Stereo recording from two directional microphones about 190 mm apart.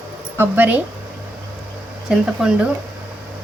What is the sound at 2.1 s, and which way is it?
Speech, 5° right (ahead or behind).